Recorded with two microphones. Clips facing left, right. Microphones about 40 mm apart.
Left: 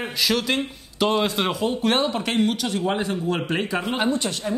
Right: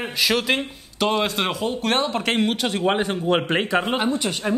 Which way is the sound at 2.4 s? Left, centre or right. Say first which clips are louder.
Right 2 dB; right.